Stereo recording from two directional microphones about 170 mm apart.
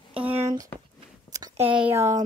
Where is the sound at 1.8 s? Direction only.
15° right (ahead or behind).